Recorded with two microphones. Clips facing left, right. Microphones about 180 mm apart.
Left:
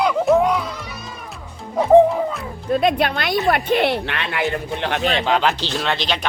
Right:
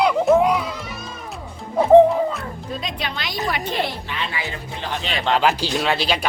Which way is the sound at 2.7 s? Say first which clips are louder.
Left 13 dB; 60° left (ahead or behind).